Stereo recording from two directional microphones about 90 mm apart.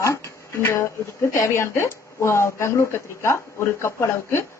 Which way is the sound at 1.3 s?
30° left (ahead or behind).